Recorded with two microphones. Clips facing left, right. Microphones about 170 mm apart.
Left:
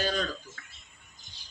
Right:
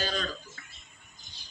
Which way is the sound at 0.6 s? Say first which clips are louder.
Even; 10° right (ahead or behind).